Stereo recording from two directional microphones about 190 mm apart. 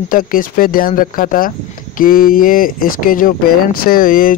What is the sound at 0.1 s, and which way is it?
Speech, 45° left (ahead or behind).